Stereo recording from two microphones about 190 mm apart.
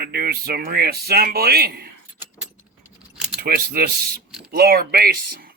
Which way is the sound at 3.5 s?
55° right (ahead or behind).